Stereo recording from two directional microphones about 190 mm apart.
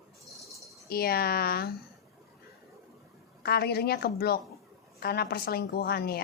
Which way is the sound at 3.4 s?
55° left (ahead or behind).